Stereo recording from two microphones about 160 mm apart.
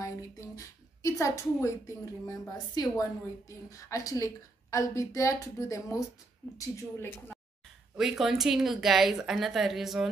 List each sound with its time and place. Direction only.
0.0 s a woman's voice: 20° left (ahead or behind)
7.9 s speech: centre (ahead or behind)